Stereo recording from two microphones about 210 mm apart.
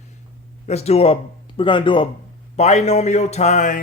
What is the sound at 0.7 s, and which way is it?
Speech, 30° left (ahead or behind).